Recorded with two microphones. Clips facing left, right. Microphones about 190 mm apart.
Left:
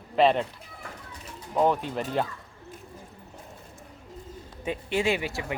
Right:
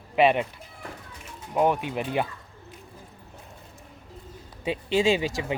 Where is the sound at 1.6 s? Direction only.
15° right (ahead or behind).